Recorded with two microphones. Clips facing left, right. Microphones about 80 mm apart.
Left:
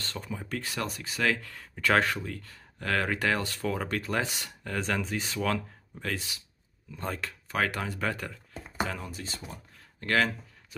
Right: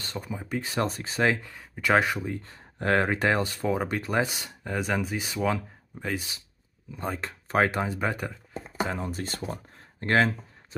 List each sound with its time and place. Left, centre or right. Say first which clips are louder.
0.0 s speech: right 2 dB; centre
0.7 s speech: right 7 dB; right; by 7.2 s centre
7.4 s speech: right 6 dB; right
9.1 s speech: right 7 dB; right
9.8 s a sound: right 3 dB; right